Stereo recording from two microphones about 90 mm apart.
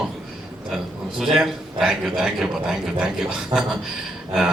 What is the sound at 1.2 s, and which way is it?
A man's voice, 5° right (ahead or behind).